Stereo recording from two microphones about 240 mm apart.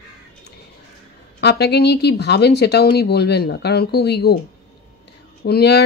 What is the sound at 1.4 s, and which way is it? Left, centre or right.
Speech, left.